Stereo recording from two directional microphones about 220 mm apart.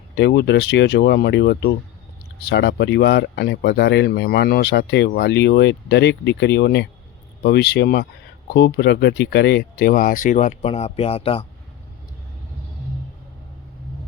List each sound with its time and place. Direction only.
0.2 s speech: 50° left (ahead or behind); by 11.4 s 25° left (ahead or behind)